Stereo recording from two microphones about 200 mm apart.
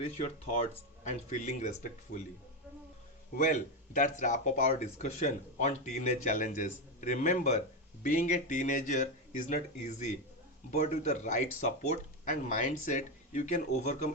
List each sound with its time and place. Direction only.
1.0 s speech: 35° left (ahead or behind)
3.3 s speech: 40° left (ahead or behind)